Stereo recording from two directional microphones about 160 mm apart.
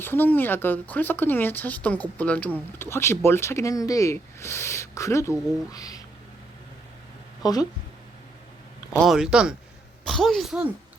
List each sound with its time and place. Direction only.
0.0 s speech: 15° left (ahead or behind)
7.4 s speech: 25° left (ahead or behind)
8.9 s speech: 5° right (ahead or behind)